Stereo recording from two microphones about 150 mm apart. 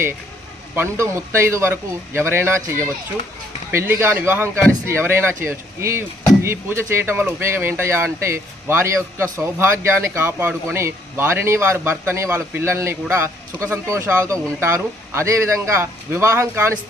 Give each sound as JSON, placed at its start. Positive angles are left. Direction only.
{"t": 0.8, "sound": "speech", "side_deg": -15}